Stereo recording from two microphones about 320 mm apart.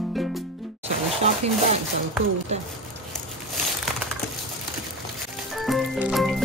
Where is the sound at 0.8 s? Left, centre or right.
Centre.